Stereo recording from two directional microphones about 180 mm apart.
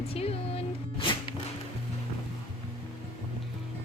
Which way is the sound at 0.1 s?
35° left (ahead or behind).